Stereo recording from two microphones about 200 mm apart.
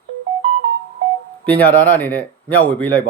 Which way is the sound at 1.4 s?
10° left (ahead or behind).